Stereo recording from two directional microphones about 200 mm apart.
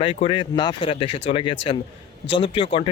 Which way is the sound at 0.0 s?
25° left (ahead or behind).